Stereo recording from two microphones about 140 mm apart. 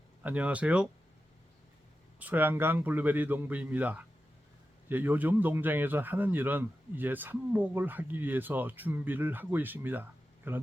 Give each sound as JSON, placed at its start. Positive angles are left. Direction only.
{"t": 0.2, "sound": "a man's voice", "side_deg": -10}
{"t": 2.1, "sound": "a man's voice", "side_deg": -10}